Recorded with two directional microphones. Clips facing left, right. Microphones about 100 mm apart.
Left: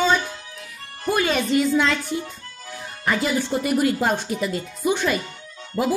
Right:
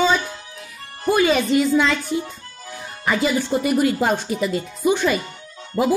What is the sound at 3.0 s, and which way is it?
Speech, 5° right (ahead or behind).